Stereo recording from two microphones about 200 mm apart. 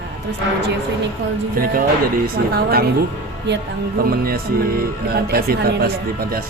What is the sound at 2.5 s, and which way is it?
Speech, 50° right (ahead or behind).